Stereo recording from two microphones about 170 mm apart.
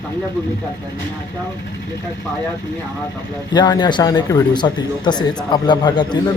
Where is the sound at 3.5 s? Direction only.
25° left (ahead or behind).